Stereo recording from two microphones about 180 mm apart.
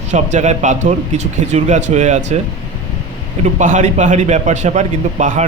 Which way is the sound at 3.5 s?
40° right (ahead or behind).